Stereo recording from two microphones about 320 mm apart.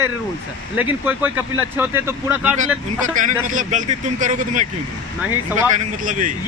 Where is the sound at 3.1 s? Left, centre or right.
Right.